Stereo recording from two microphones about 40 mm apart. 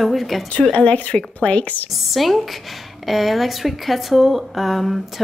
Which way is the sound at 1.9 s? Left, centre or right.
Centre.